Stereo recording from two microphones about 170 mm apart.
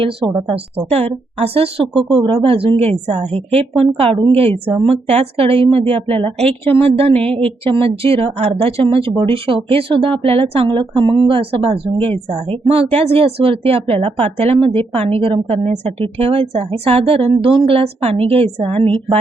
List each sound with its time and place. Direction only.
0.9 s speech: 35° right (ahead or behind)